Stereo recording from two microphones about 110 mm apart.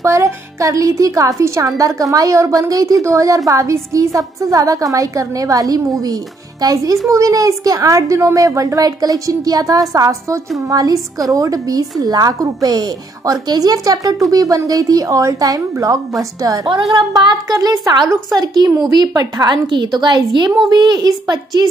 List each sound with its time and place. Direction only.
0.0 s a woman's voice: 25° right (ahead or behind)